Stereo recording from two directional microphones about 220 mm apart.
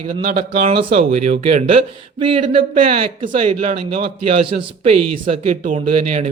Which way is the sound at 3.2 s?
35° right (ahead or behind).